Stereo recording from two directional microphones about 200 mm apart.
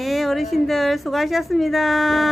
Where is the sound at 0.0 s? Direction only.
Centre (ahead or behind).